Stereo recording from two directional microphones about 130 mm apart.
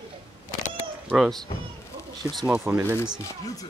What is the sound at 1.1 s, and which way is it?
Speech, centre (ahead or behind).